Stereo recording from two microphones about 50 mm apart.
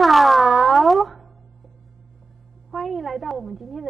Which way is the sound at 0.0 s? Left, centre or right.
Centre.